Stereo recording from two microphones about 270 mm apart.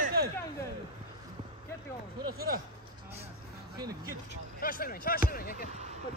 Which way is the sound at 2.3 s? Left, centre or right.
Right.